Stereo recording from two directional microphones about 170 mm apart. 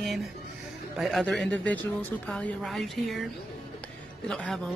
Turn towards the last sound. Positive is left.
turn(degrees=5)  # may be behind; listen again after turning